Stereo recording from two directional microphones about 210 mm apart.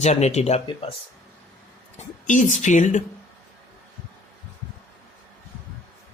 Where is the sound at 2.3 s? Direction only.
35° left (ahead or behind).